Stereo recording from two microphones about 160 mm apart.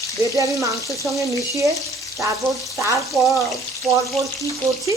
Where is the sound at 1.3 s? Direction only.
20° right (ahead or behind).